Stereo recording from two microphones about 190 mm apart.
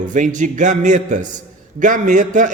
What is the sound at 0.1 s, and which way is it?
A man's voice, 40° right (ahead or behind).